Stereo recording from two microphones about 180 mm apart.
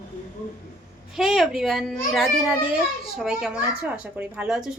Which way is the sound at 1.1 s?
Centre (ahead or behind).